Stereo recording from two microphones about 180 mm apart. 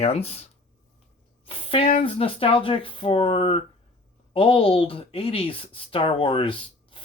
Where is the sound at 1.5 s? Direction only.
30° left (ahead or behind).